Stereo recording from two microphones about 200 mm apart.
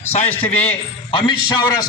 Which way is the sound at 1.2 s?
20° left (ahead or behind).